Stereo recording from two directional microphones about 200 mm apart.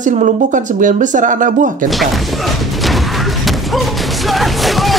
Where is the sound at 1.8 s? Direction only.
Centre (ahead or behind).